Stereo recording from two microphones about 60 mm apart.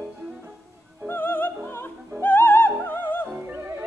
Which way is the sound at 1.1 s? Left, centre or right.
Left.